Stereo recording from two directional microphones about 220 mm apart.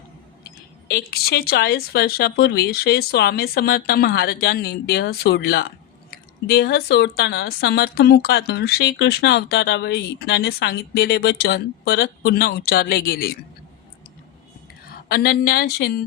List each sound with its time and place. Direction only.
0.9 s speech: 45° left (ahead or behind)
14.8 s a woman's voice: 45° left (ahead or behind)